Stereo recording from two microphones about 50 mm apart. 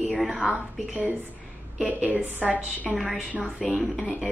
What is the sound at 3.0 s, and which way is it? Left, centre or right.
Speech, centre.